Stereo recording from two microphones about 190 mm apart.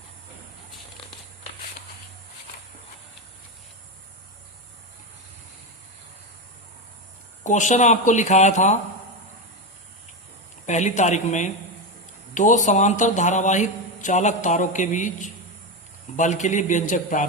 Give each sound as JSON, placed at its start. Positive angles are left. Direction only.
{"t": 7.4, "sound": "speech", "side_deg": 40}
{"t": 10.7, "sound": "speech", "side_deg": 40}